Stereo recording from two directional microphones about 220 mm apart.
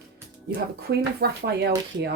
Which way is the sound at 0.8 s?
45° right (ahead or behind).